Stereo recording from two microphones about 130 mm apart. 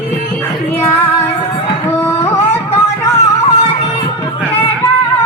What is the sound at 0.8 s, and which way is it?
Music, 15° left (ahead or behind).